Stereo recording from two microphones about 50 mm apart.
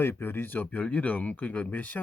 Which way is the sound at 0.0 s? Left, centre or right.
Left.